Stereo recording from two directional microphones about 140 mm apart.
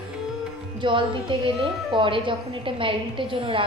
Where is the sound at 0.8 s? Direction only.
35° right (ahead or behind).